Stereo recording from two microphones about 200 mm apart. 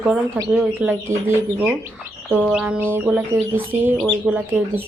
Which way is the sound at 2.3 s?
5° right (ahead or behind).